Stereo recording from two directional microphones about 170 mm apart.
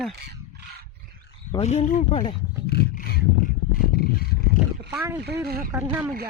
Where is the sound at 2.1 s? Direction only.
35° left (ahead or behind).